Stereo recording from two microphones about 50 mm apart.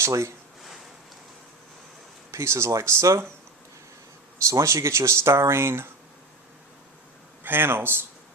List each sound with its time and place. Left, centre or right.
0.0 s speech: right
2.3 s speech: right
4.4 s speech: right
5.3 s speech: right
7.4 s speech: right